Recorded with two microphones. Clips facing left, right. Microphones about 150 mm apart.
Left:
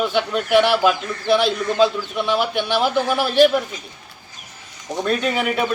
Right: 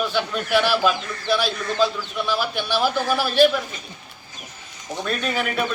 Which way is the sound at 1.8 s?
20° left (ahead or behind).